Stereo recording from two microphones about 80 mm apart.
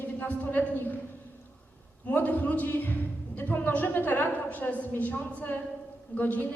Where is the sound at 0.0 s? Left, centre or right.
Left.